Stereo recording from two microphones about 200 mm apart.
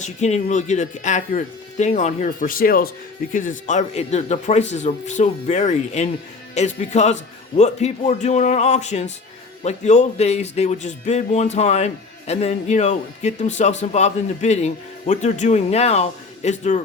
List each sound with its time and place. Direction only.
0.0 s speech: 35° left (ahead or behind)